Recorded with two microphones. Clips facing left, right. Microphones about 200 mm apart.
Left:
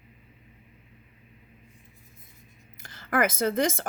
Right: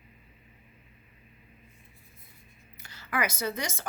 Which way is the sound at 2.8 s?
50° left (ahead or behind).